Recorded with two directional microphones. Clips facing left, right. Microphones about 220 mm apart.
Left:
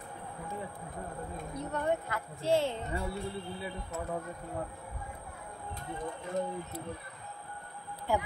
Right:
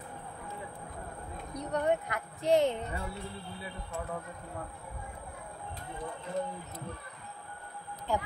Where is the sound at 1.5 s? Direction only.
15° right (ahead or behind).